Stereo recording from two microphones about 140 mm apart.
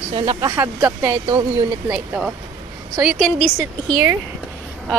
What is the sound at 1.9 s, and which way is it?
Speech, 10° right (ahead or behind).